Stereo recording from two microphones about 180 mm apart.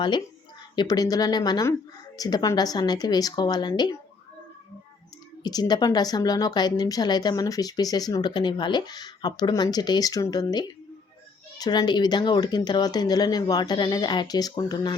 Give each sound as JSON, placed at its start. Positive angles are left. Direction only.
{"t": 0.8, "sound": "a woman's voice", "side_deg": 20}
{"t": 5.4, "sound": "a woman's voice", "side_deg": 20}